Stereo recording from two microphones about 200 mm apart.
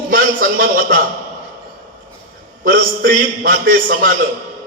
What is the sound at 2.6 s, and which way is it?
A man's voice, 45° right (ahead or behind).